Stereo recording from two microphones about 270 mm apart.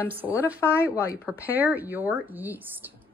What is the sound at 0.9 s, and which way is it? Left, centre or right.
Speech, centre.